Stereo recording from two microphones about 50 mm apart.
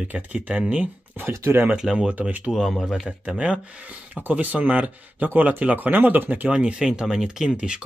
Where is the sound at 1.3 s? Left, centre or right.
Right.